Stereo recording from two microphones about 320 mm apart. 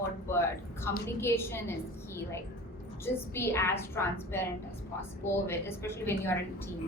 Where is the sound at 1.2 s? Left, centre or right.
Centre.